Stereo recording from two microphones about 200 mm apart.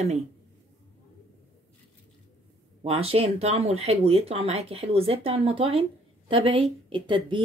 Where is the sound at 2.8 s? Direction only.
30° right (ahead or behind).